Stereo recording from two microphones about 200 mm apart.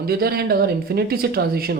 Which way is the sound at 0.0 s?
50° right (ahead or behind).